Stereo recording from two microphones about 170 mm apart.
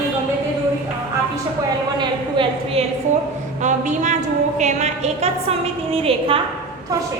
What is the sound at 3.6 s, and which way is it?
A woman's voice, 45° right (ahead or behind).